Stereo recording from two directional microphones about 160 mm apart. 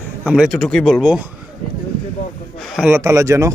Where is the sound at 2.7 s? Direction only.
10° right (ahead or behind).